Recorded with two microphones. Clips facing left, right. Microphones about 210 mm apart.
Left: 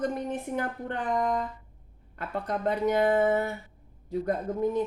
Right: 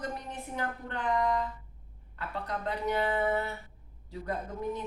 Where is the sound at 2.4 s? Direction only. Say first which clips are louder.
Left 7 dB; 50° left (ahead or behind).